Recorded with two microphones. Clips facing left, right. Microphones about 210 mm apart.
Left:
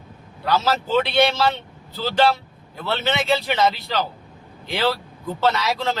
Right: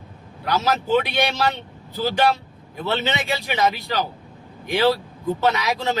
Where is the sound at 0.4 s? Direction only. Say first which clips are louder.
Left 1 dB; 15° right (ahead or behind).